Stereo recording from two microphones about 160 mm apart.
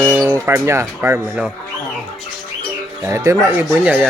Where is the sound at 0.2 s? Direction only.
20° right (ahead or behind).